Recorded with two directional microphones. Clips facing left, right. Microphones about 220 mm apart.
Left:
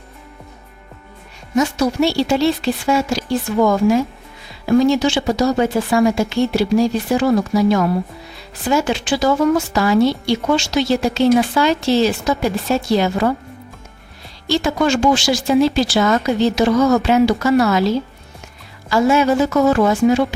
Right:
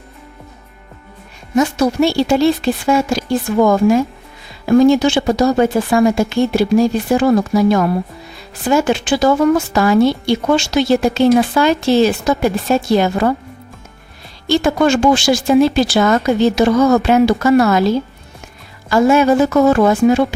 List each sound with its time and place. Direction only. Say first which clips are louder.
1.5 s a woman's voice: right 2 dB; 55° right (ahead or behind)
14.4 s a woman's voice: right 4 dB; 55° right (ahead or behind)